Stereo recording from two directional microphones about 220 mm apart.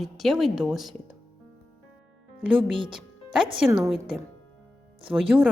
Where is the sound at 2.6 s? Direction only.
20° right (ahead or behind).